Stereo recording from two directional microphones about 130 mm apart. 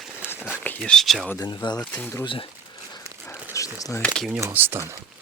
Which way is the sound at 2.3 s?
40° left (ahead or behind).